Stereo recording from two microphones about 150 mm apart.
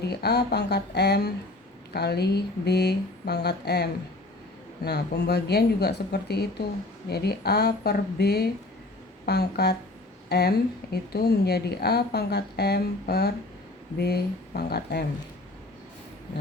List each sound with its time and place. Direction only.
0.1 s a woman's voice: 90° left
4.9 s a woman's voice: 90° left